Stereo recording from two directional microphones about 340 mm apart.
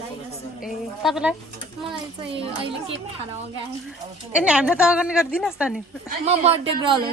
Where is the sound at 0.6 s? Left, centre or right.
Centre.